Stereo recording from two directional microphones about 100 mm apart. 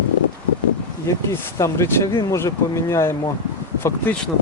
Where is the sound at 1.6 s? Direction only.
30° left (ahead or behind).